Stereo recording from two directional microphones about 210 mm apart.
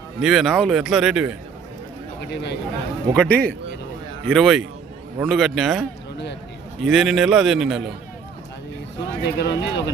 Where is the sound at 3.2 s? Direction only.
5° left (ahead or behind).